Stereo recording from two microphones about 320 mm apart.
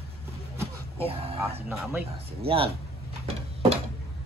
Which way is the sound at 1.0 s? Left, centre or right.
Centre.